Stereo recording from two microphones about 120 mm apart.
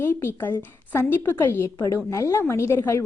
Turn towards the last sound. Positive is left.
turn(degrees=20)  # may be behind; listen again after turning